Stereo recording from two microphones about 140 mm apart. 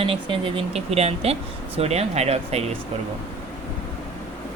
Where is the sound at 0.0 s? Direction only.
40° right (ahead or behind).